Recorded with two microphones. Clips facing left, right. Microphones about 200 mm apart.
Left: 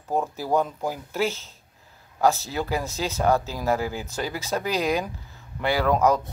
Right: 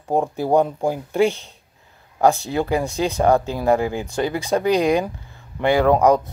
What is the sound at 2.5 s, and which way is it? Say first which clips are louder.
Speech: right 6 dB; 55° right (ahead or behind).